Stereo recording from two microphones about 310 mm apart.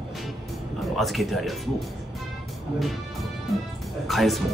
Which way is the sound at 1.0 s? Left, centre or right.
Centre.